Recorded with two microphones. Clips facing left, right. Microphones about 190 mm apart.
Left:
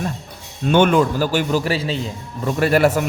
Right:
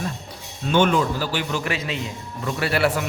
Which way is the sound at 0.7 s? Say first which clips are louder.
Left 4 dB; 55° left (ahead or behind).